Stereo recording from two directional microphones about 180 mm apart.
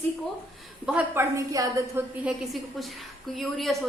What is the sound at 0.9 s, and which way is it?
Speech, 5° right (ahead or behind).